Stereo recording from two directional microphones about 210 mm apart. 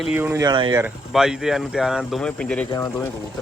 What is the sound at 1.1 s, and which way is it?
Speech, centre (ahead or behind).